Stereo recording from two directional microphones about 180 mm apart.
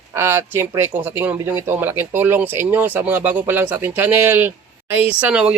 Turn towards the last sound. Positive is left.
turn(degrees=-5)  # may be behind; listen again after turning